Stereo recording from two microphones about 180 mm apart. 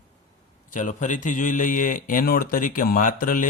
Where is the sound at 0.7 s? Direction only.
45° left (ahead or behind).